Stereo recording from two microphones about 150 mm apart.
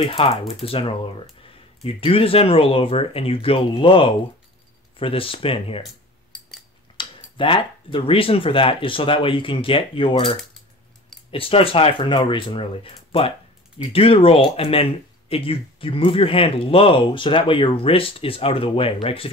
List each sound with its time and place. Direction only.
0.0 s speech: 40° left (ahead or behind)
7.0 s speech: 35° left (ahead or behind)